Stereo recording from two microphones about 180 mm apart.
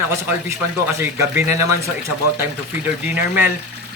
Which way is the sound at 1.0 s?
10° right (ahead or behind).